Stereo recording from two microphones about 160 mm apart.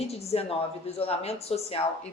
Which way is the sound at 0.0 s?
40° left (ahead or behind).